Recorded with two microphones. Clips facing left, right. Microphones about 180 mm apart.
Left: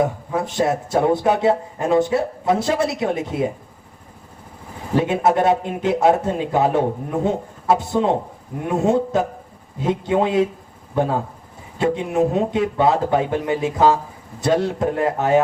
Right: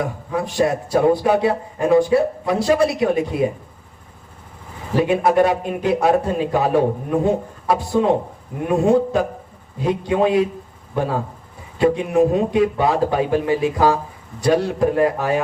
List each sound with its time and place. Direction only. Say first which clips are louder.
0.0 s a man's voice: left 2 dB; 25° left (ahead or behind)
4.9 s a man's voice: right 2 dB; 25° left (ahead or behind)
11.8 s a man's voice: right 3 dB; 25° left (ahead or behind)